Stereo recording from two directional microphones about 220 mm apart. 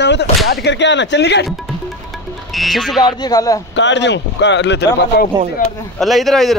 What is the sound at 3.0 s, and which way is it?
Speech, 20° left (ahead or behind).